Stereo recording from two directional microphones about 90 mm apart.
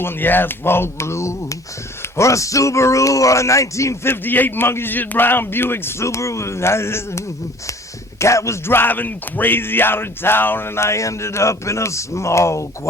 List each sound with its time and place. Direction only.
0.0 s speech: 20° left (ahead or behind)